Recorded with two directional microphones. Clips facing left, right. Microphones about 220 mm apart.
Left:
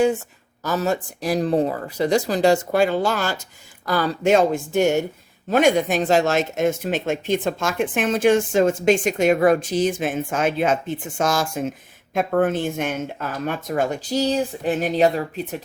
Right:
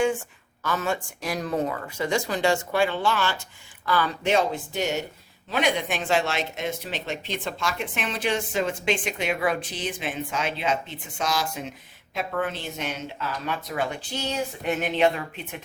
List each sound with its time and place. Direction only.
0.6 s speech: 40° left (ahead or behind)